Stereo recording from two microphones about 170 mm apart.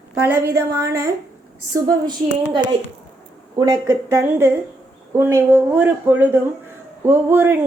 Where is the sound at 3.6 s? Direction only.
20° right (ahead or behind).